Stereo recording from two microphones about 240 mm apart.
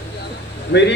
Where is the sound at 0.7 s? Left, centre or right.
Left.